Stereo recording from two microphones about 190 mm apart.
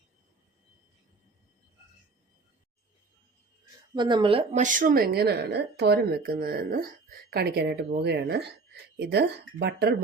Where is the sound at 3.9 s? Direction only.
20° right (ahead or behind).